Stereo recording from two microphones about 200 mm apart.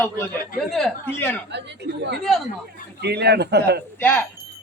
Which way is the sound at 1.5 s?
60° right (ahead or behind).